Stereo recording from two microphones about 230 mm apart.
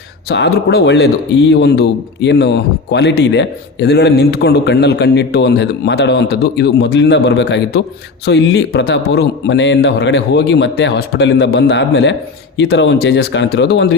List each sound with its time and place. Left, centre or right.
0.3 s speech: left